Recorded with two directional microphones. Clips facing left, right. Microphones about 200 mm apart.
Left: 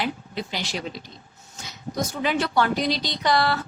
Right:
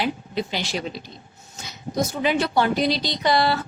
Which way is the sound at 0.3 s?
20° right (ahead or behind).